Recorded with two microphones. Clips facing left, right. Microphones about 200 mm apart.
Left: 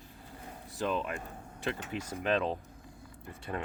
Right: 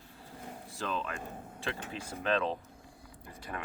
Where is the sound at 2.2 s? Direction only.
15° left (ahead or behind).